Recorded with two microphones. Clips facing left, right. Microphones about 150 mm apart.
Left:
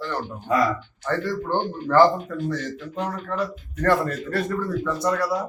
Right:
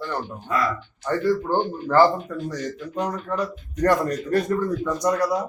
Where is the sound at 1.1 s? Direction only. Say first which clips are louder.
Right 3 dB; 10° right (ahead or behind).